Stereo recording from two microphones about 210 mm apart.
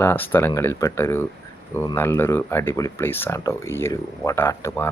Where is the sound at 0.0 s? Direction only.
10° left (ahead or behind).